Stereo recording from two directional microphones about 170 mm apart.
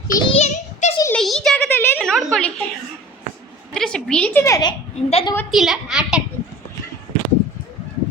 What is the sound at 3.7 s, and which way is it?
Speech, 5° left (ahead or behind).